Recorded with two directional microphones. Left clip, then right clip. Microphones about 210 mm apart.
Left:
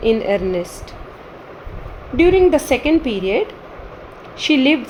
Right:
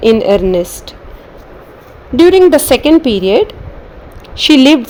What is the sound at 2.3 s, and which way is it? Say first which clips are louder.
A woman's voice: right 7 dB; 45° right (ahead or behind).